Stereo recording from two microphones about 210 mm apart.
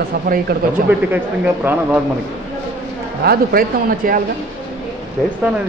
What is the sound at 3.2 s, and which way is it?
Speech, 45° right (ahead or behind).